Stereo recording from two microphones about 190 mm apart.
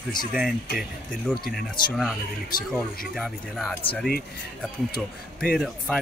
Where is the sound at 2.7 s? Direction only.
Centre (ahead or behind).